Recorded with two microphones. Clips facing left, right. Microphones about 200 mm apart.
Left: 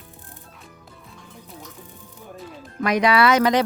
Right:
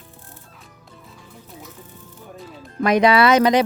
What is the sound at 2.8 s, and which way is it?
Speech, 25° right (ahead or behind).